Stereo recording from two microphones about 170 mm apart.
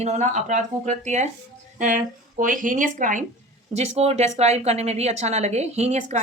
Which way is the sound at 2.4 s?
50° right (ahead or behind).